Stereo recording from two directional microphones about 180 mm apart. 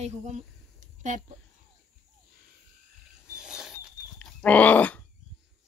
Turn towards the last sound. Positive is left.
turn(degrees=10)  # may be behind; listen again after turning